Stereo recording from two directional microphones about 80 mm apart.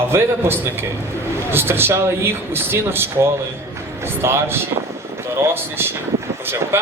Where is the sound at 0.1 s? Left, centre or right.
Right.